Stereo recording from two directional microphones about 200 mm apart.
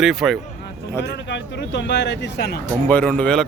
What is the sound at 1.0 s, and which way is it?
Speech, 60° left (ahead or behind).